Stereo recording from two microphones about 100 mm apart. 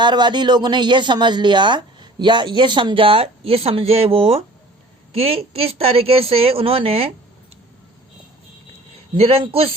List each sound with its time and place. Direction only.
0.0 s speech: 50° right (ahead or behind); by 7.1 s 75° right (ahead or behind)
9.1 s speech: 80° right